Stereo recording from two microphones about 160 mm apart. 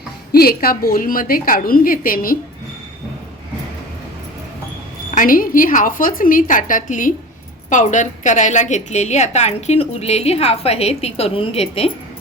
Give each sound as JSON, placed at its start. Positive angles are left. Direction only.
{"t": 0.3, "sound": "a woman's voice", "side_deg": 75}
{"t": 5.1, "sound": "a woman's voice", "side_deg": 60}